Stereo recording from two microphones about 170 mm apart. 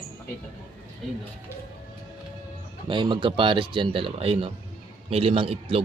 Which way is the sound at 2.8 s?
30° right (ahead or behind).